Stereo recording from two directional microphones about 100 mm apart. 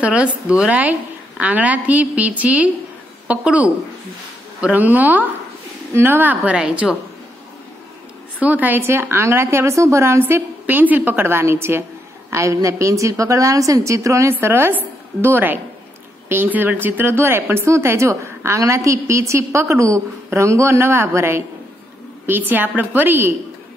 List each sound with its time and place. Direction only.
0.0 s a woman's voice: 10° right (ahead or behind)
8.4 s a woman's voice: 15° right (ahead or behind)